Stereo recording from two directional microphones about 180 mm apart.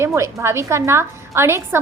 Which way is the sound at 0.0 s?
15° right (ahead or behind).